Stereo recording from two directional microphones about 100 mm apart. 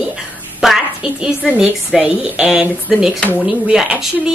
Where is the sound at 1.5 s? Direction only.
10° right (ahead or behind).